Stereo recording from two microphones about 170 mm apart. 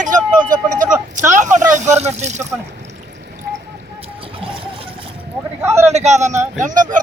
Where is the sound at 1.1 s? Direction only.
45° right (ahead or behind).